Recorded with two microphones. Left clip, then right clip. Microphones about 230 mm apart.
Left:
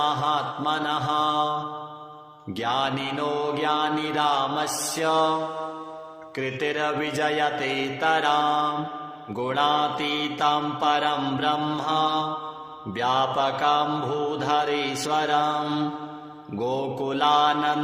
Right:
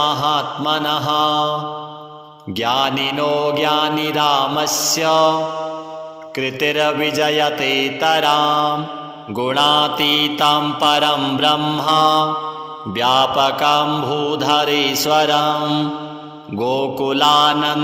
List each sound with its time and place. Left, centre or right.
0.0 s mantra: right
2.6 s mantra: right